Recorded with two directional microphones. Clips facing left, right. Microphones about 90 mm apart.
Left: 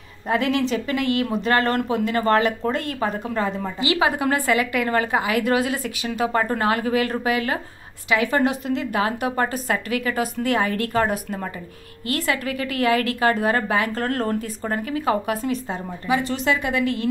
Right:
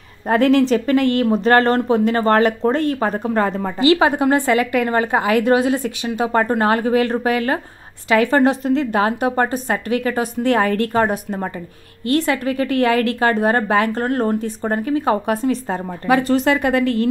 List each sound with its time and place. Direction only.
0.3 s a woman's voice: 45° right (ahead or behind)
4.2 s a woman's voice: 30° right (ahead or behind)
13.9 s a woman's voice: 20° right (ahead or behind)
16.1 s speech: 45° right (ahead or behind)